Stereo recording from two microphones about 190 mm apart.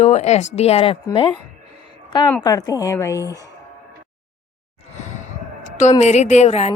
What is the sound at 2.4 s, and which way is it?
A woman's voice, 20° left (ahead or behind).